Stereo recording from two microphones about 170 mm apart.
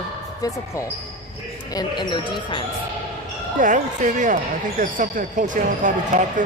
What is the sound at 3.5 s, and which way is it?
Speech, 50° right (ahead or behind).